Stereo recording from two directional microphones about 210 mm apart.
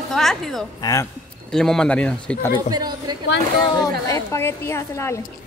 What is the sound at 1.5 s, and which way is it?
Speech, 5° left (ahead or behind).